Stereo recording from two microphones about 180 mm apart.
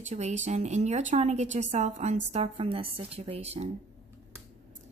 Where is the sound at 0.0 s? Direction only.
40° right (ahead or behind).